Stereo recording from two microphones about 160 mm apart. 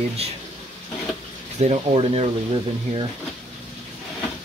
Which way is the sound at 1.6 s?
40° right (ahead or behind).